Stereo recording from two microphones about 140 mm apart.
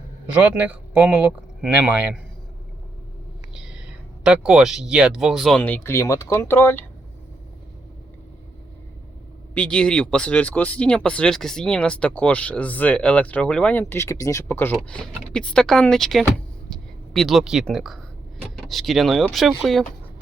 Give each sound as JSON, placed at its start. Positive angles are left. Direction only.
{"t": 0.3, "sound": "speech", "side_deg": -10}
{"t": 3.5, "sound": "speech", "side_deg": -5}
{"t": 5.6, "sound": "speech", "side_deg": 15}
{"t": 9.6, "sound": "speech", "side_deg": 5}